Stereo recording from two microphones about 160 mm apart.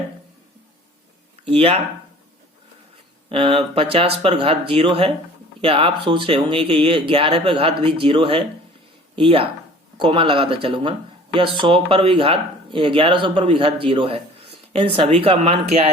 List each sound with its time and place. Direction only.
1.5 s speech: 35° right (ahead or behind)
3.2 s speech: 35° right (ahead or behind)